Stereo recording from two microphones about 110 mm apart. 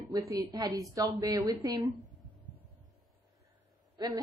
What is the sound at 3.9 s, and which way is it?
Speech, 40° right (ahead or behind).